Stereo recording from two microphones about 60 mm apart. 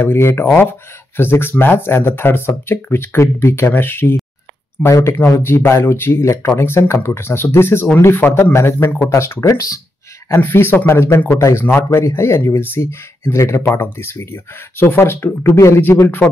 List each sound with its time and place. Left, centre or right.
0.0 s speech: left
4.8 s speech: left
5.4 s speech: left
10.4 s speech: left
13.7 s speech: left
15.4 s speech: left